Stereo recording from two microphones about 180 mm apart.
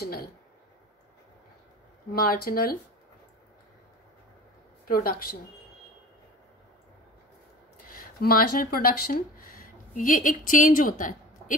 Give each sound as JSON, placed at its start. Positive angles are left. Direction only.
{"t": 0.0, "sound": "speech", "side_deg": 60}
{"t": 2.1, "sound": "speech", "side_deg": 55}
{"t": 4.8, "sound": "speech", "side_deg": 55}
{"t": 7.7, "sound": "speech", "side_deg": 55}